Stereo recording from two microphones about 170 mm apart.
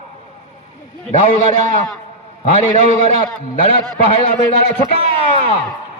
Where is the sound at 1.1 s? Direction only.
50° left (ahead or behind).